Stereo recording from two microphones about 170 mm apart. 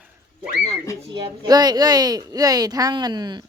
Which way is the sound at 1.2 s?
25° right (ahead or behind).